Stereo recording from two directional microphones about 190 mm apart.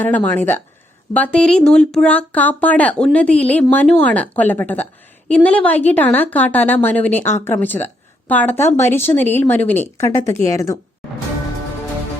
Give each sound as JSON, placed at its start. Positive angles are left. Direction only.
{"t": 0.0, "sound": "speech", "side_deg": 10}